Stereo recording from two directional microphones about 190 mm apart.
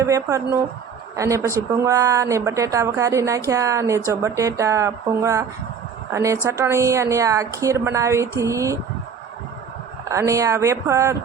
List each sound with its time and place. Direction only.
0.0 s speech: 15° right (ahead or behind)
10.1 s speech: 15° right (ahead or behind)